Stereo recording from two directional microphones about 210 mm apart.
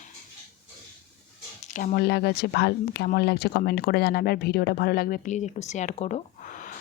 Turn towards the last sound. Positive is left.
turn(degrees=35)  # may be behind; listen again after turning